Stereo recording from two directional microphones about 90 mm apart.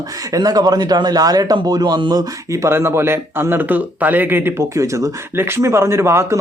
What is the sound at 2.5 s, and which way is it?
Speech, 30° right (ahead or behind).